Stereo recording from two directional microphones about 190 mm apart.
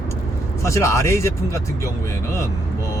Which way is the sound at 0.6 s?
15° left (ahead or behind).